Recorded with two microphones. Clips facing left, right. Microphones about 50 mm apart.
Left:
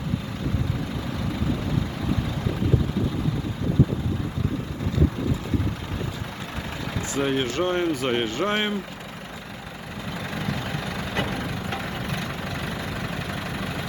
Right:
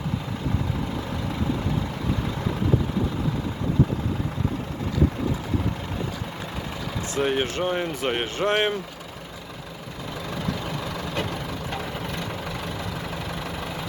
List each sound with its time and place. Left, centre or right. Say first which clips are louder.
7.2 s speech: even; centre
8.4 s speech: right 2 dB; right
10.6 s vehicle: even; centre